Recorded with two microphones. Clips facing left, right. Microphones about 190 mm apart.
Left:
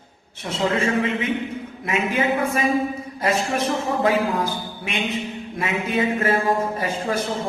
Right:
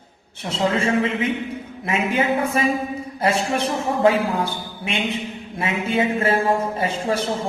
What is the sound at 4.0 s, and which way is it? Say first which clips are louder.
A man's voice: right 4 dB; 30° right (ahead or behind).